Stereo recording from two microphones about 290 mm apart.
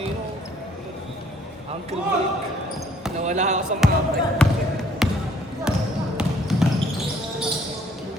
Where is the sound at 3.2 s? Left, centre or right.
Right.